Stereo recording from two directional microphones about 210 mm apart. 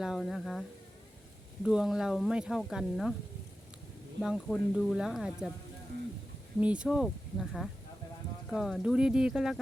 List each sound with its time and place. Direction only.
0.0 s speech: centre (ahead or behind)
1.6 s speech: centre (ahead or behind)
4.2 s speech: centre (ahead or behind)
6.6 s speech: 5° right (ahead or behind)